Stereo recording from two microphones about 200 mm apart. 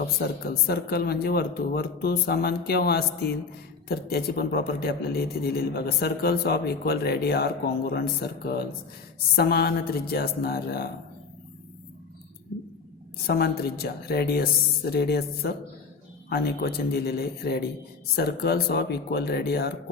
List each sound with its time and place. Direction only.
0.0 s a man's voice: 55° left (ahead or behind)
13.2 s a man's voice: 50° left (ahead or behind)